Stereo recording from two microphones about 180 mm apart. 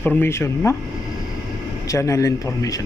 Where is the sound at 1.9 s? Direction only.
15° left (ahead or behind).